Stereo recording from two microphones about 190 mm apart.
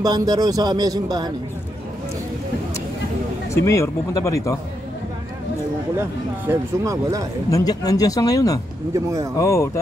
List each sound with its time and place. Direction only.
0.0 s speech: 20° right (ahead or behind)
3.5 s speech: 15° left (ahead or behind)
5.9 s speech: 10° right (ahead or behind)
7.5 s speech: 20° left (ahead or behind)
8.9 s speech: 15° right (ahead or behind)
9.4 s speech: 15° left (ahead or behind)